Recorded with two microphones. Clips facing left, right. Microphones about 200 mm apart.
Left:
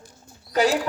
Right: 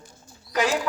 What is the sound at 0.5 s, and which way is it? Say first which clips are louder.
Speech: left 3 dB; 35° left (ahead or behind).